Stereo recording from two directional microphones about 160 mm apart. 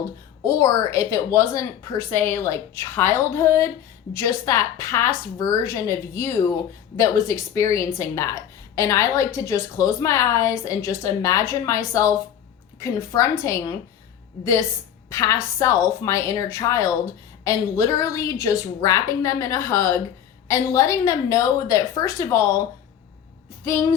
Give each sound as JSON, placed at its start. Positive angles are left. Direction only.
{"t": 0.4, "sound": "a woman's voice", "side_deg": 20}
{"t": 15.1, "sound": "a woman's voice", "side_deg": 20}
{"t": 23.6, "sound": "a woman's voice", "side_deg": 15}